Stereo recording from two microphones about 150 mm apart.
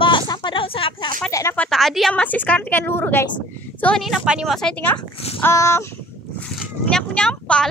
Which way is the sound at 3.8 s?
Centre (ahead or behind).